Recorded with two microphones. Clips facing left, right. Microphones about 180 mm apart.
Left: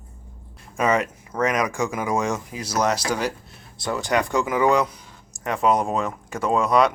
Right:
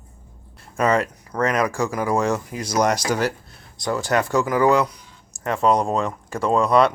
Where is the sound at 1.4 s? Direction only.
15° left (ahead or behind).